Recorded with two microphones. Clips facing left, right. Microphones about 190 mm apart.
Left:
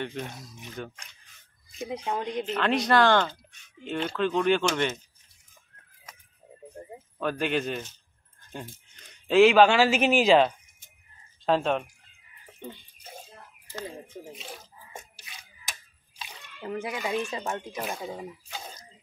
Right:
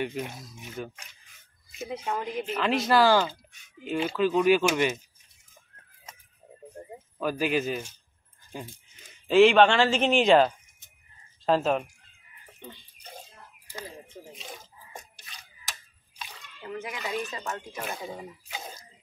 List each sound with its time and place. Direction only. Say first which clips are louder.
0.0 s speech: right 2 dB; 10° right (ahead or behind)
2.1 s a woman's voice: left 2 dB; 5° right (ahead or behind)
7.2 s a woman's voice: right 1 dB; 5° right (ahead or behind)
16.6 s speech: left 4 dB; 30° left (ahead or behind)
17.8 s a woman's voice: left 2 dB; centre (ahead or behind)